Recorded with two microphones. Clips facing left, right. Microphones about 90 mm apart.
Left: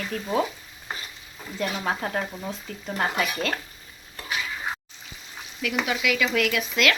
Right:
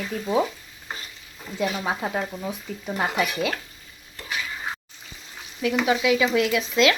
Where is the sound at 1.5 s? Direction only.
5° right (ahead or behind).